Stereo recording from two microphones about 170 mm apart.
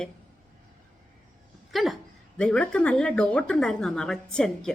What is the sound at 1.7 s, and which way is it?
A woman's voice, centre (ahead or behind).